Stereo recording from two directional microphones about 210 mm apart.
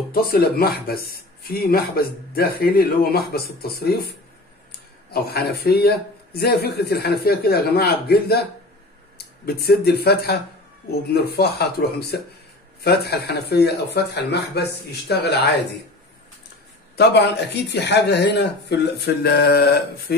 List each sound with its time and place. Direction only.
0.1 s speech: 45° left (ahead or behind)
5.1 s speech: 50° left (ahead or behind)
9.6 s speech: 50° left (ahead or behind)
16.9 s speech: 50° left (ahead or behind)